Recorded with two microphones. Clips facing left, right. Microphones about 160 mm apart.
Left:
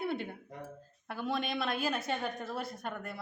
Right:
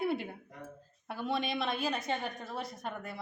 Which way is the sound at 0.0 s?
5° right (ahead or behind).